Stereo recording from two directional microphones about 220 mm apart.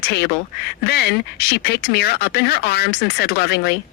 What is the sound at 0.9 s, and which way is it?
Speech, 45° left (ahead or behind).